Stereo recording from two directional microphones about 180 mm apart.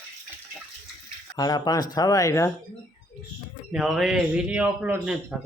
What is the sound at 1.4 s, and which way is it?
Speech, 20° left (ahead or behind).